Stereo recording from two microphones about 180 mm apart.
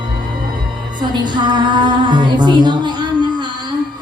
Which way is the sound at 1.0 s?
25° right (ahead or behind).